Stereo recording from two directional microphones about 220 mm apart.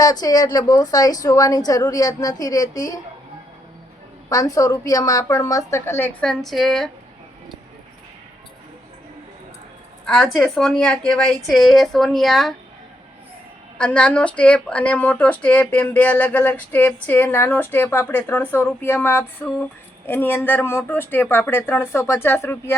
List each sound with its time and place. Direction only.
0.0 s a woman's voice: 15° left (ahead or behind)
4.3 s a woman's voice: 15° left (ahead or behind)
10.2 s speech: centre (ahead or behind)
13.7 s a woman's voice: 5° left (ahead or behind)